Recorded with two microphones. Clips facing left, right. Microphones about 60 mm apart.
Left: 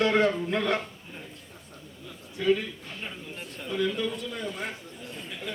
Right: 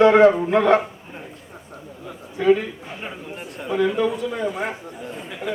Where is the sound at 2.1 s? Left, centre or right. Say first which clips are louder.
Right 8 dB; right.